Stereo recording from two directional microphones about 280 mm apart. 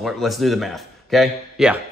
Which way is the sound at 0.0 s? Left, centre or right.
Centre.